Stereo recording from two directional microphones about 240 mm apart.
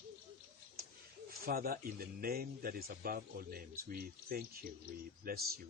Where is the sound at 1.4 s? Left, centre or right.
Right.